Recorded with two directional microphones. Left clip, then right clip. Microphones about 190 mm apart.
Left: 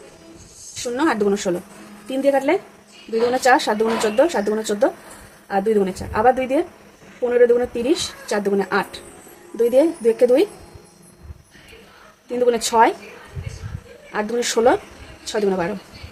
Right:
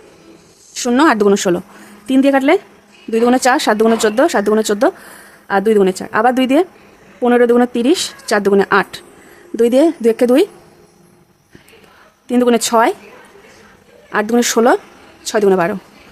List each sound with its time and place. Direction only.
0.7 s speech: 50° right (ahead or behind)
12.3 s speech: 40° right (ahead or behind)
14.1 s speech: 40° right (ahead or behind)